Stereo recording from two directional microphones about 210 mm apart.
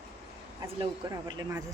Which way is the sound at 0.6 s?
25° right (ahead or behind).